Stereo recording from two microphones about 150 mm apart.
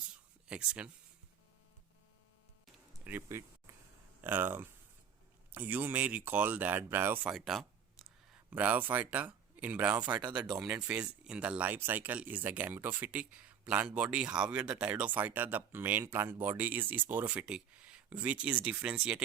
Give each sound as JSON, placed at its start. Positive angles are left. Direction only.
{"t": 0.4, "sound": "speech", "side_deg": -5}
{"t": 2.7, "sound": "a sound", "side_deg": -10}
{"t": 4.2, "sound": "speech", "side_deg": -15}
{"t": 7.3, "sound": "a sound", "side_deg": 0}
{"t": 8.4, "sound": "speech", "side_deg": -10}
{"t": 10.2, "sound": "speech", "side_deg": -30}
{"t": 10.6, "sound": "speech", "side_deg": -5}